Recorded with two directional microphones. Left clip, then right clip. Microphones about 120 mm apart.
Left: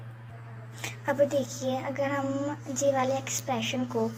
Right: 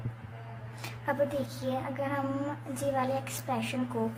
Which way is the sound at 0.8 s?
25° left (ahead or behind).